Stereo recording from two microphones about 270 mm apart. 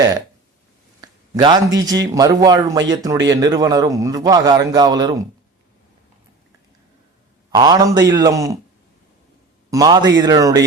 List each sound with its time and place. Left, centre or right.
1.0 s a sound: centre
1.8 s a man's voice: centre
7.5 s a man's voice: centre
9.6 s a man's voice: centre